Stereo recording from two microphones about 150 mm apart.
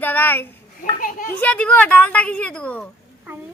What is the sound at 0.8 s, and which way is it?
Speech, 65° left (ahead or behind).